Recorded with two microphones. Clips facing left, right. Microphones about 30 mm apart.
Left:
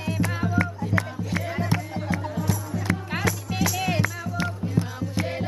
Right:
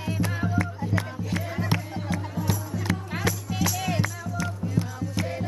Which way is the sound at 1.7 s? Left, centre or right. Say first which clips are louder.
Even; centre.